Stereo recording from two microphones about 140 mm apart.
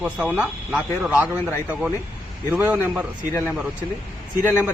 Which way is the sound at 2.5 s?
15° right (ahead or behind).